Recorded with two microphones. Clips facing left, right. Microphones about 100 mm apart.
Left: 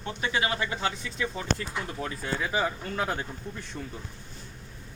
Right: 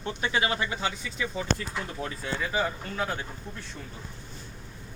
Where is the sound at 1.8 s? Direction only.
10° left (ahead or behind).